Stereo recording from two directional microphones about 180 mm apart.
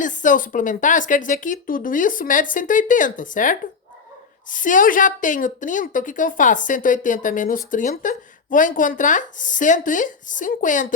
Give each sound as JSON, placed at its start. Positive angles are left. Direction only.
{"t": 0.0, "sound": "a woman's voice", "side_deg": 45}